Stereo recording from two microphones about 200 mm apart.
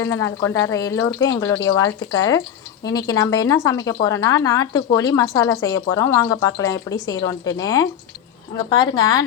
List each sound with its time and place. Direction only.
0.0 s speech: 15° left (ahead or behind)